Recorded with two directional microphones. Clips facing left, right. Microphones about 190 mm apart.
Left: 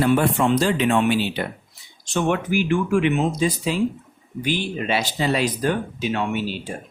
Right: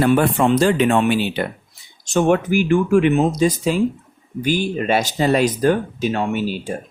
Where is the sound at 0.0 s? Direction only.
55° right (ahead or behind).